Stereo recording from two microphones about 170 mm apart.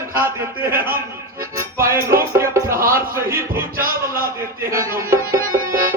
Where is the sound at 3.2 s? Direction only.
60° right (ahead or behind).